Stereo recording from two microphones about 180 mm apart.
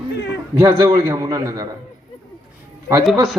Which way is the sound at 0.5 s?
15° right (ahead or behind).